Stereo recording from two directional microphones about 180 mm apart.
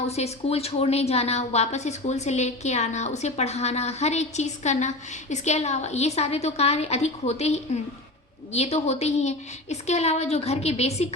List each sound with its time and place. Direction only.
0.0 s a woman's voice: 35° left (ahead or behind)